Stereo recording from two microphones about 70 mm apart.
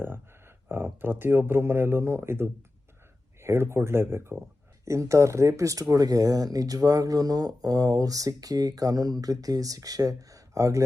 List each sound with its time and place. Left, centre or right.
0.0 s speech: right